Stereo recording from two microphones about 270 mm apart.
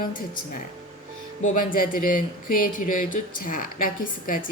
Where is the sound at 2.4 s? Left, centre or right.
Left.